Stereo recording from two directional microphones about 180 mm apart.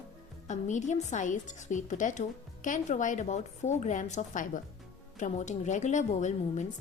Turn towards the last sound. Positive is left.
turn(degrees=40)  # may be behind; listen again after turning